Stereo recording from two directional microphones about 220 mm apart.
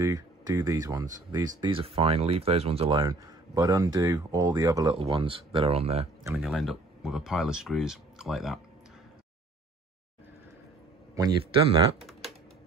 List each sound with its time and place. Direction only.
0.0 s speech: 15° right (ahead or behind)
6.3 s speech: centre (ahead or behind)
11.2 s speech: 15° right (ahead or behind)